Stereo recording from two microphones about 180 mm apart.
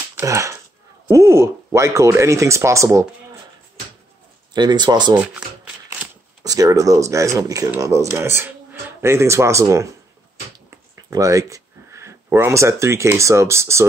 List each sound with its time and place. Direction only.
0.1 s speech: 15° right (ahead or behind)
4.6 s speech: 25° right (ahead or behind)
5.1 s speech: 5° right (ahead or behind)
6.4 s speech: 20° right (ahead or behind)